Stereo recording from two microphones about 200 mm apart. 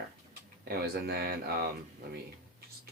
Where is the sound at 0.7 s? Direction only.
50° right (ahead or behind).